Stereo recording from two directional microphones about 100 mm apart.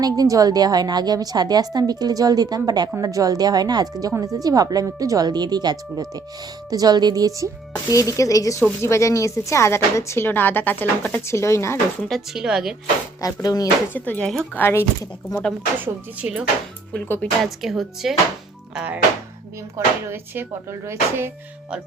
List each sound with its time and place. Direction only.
0.0 s a woman's voice: 40° right (ahead or behind)
7.9 s speech: 35° left (ahead or behind)
12.0 s speech: centre (ahead or behind)
13.2 s speech: 40° left (ahead or behind)
13.9 s speech: 15° left (ahead or behind)
15.8 s speech: 10° right (ahead or behind)
16.9 s speech: 10° left (ahead or behind)
17.4 s speech: centre (ahead or behind)
20.1 s speech: 25° right (ahead or behind)